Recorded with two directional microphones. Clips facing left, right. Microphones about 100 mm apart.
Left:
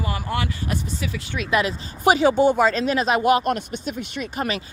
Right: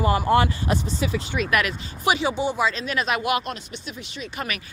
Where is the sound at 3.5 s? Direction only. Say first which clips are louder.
Left 8 dB; 50° left (ahead or behind).